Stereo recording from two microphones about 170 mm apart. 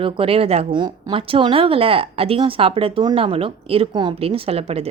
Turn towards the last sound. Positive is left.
turn(degrees=-35)  # may be behind; listen again after turning